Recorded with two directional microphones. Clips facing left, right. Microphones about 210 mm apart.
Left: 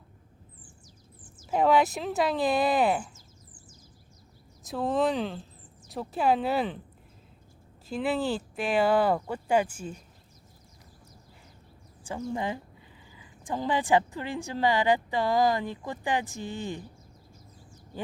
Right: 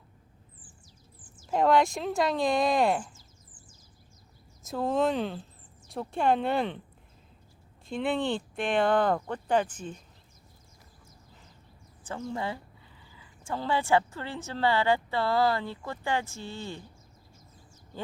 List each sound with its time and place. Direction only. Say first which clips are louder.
1.5 s speech: even; 5° left (ahead or behind)
4.6 s speech: even; centre (ahead or behind)
7.9 s a woman's voice: left 1 dB; 5° left (ahead or behind)
12.0 s a woman's voice: left 2 dB; 15° left (ahead or behind)